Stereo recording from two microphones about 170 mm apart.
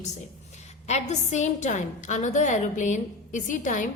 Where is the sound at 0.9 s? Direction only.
40° left (ahead or behind).